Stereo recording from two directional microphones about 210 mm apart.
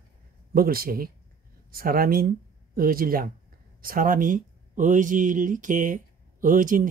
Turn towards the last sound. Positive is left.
turn(degrees=-40)  # may be behind; listen again after turning